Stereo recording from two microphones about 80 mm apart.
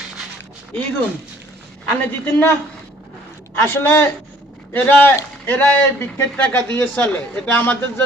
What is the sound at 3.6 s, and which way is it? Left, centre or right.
Speech, left.